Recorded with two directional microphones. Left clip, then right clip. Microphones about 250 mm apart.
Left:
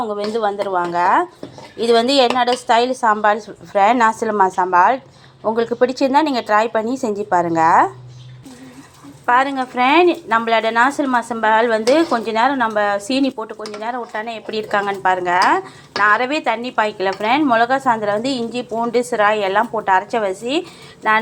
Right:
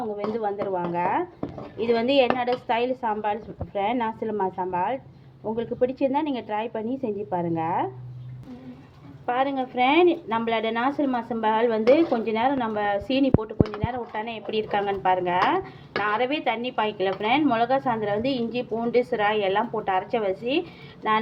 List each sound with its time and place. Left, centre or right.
0.3 s a woman's voice: left
1.8 s a woman's voice: left
9.2 s a woman's voice: centre